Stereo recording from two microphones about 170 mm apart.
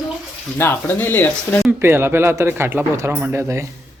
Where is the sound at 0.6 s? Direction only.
10° left (ahead or behind).